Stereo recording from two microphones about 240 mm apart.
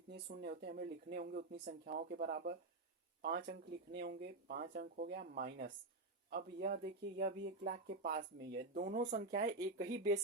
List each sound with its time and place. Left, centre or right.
0.1 s speech: right